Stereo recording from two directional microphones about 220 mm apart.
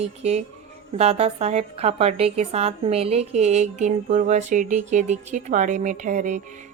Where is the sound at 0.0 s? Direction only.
30° right (ahead or behind).